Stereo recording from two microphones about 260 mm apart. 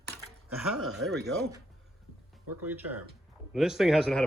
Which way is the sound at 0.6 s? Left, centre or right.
Centre.